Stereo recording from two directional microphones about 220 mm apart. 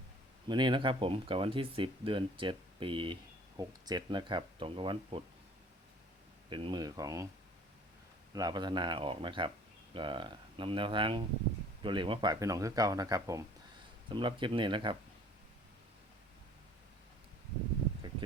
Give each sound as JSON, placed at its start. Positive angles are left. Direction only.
{"t": 0.4, "sound": "speech", "side_deg": -20}
{"t": 6.5, "sound": "speech", "side_deg": -20}
{"t": 8.3, "sound": "speech", "side_deg": -15}